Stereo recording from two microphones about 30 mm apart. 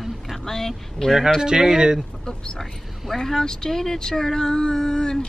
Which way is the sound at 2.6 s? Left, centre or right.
Centre.